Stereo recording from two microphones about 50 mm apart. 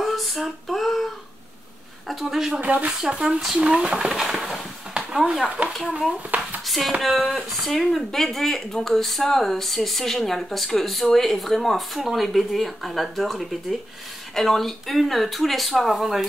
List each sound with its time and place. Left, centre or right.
0.0 s a sound: centre
2.0 s speech: centre
2.6 s speech: right
3.0 s speech: centre
4.2 s speech: centre
6.6 s a sound: centre
7.0 s speech: centre